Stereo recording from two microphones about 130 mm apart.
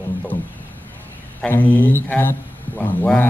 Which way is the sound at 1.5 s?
15° left (ahead or behind).